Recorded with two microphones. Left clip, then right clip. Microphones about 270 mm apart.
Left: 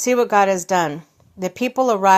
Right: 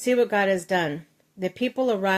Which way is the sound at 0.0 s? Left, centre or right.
Centre.